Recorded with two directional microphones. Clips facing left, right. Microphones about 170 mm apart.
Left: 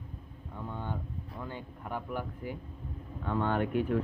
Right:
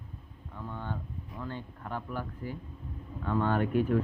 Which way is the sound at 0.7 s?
15° left (ahead or behind).